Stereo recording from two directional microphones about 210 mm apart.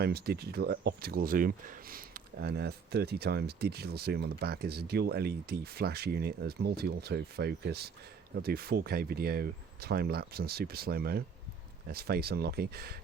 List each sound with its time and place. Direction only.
0.0 s speech: 50° right (ahead or behind)